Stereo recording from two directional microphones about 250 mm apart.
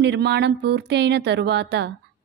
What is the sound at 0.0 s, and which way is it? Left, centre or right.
A woman's voice, right.